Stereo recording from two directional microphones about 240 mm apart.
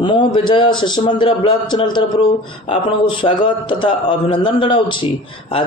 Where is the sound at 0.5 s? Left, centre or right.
Centre.